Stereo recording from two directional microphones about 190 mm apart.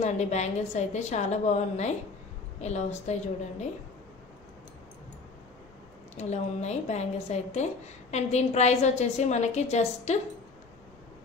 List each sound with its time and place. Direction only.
0.0 s a woman's voice: 35° left (ahead or behind)
6.1 s a woman's voice: 35° left (ahead or behind)